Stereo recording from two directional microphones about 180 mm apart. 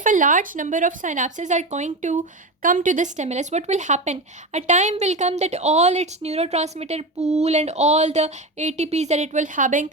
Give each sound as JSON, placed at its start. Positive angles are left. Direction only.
{"t": 0.0, "sound": "speech", "side_deg": -45}